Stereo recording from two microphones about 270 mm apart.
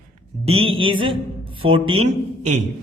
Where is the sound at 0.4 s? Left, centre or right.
Right.